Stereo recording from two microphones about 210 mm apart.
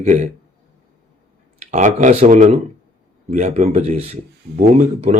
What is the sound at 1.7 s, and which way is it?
Speech, 35° right (ahead or behind).